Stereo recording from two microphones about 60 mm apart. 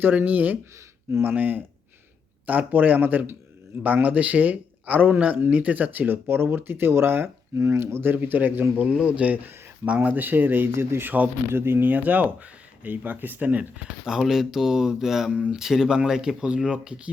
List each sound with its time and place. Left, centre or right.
0.0 s speech: right
8.1 s speech: right
8.9 s speech: centre; by 11.9 s right
11.9 s speech: right
14.0 s speech: centre